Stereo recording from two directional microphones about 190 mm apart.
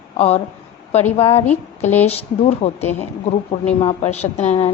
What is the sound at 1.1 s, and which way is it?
A woman's voice, 30° left (ahead or behind).